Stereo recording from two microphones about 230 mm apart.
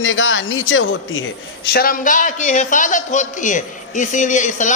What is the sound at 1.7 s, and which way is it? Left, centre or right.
A man's voice, left.